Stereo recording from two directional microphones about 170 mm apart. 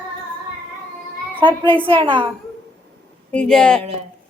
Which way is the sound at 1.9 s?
30° right (ahead or behind).